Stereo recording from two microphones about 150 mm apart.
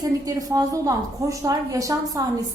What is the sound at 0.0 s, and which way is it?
A woman's voice, 25° right (ahead or behind).